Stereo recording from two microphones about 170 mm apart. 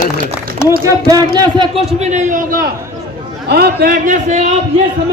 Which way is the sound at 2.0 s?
45° right (ahead or behind).